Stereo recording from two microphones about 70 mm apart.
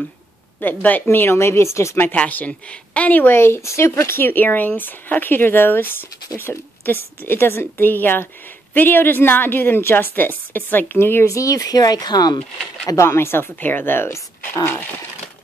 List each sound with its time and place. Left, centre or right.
0.6 s speech: left
2.1 s speech: left
3.3 s speech: left
11.2 s speech: left
12.8 s speech: left